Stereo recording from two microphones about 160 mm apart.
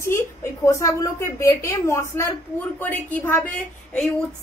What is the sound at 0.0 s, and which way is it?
A woman's voice, 15° left (ahead or behind).